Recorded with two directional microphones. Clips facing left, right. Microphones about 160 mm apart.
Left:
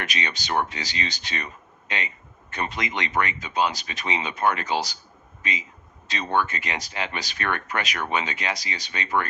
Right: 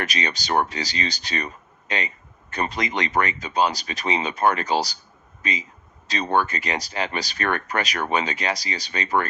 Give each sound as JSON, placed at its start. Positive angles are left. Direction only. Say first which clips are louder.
{"t": 0.0, "sound": "a man's voice", "louder": "right 3 dB", "side_deg": -40}